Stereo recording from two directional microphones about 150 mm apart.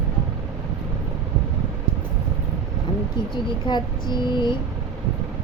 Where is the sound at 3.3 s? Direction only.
30° left (ahead or behind).